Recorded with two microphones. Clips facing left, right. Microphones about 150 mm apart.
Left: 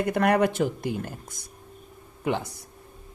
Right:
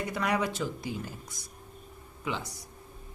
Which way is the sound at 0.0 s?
55° left (ahead or behind).